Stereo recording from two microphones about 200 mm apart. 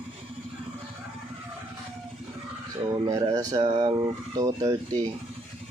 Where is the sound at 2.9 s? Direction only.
15° right (ahead or behind).